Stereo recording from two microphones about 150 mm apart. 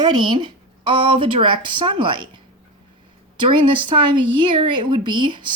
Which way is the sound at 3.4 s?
35° right (ahead or behind).